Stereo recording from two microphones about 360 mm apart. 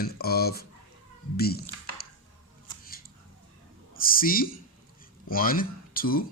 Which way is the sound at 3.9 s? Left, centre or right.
Left.